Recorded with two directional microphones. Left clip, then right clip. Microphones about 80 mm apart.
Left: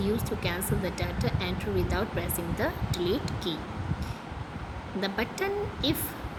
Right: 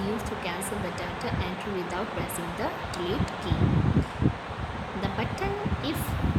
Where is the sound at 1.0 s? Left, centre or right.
Left.